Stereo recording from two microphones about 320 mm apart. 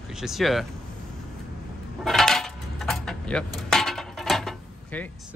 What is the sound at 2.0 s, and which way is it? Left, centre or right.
Keys jangling, centre.